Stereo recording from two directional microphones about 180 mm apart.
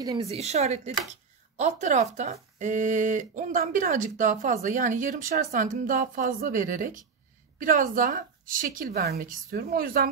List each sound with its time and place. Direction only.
0.2 s a woman's voice: 35° right (ahead or behind); by 10.0 s 55° right (ahead or behind)